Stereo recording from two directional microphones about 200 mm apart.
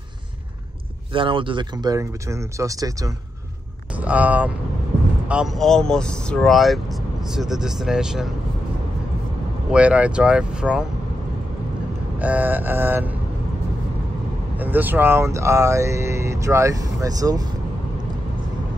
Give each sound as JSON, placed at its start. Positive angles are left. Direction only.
{"t": 1.1, "sound": "speech", "side_deg": -25}
{"t": 9.7, "sound": "speech", "side_deg": -5}
{"t": 12.2, "sound": "speech", "side_deg": -10}
{"t": 14.6, "sound": "speech", "side_deg": -10}